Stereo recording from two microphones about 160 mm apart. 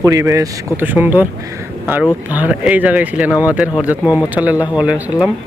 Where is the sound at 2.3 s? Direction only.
10° right (ahead or behind).